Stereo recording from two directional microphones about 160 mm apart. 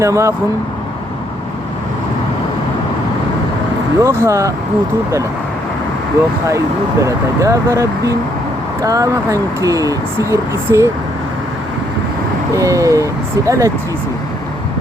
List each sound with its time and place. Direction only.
0.0 s speech: 20° right (ahead or behind)
4.0 s speech: 15° right (ahead or behind)
7.0 s speech: 20° right (ahead or behind)
12.5 s speech: 20° right (ahead or behind)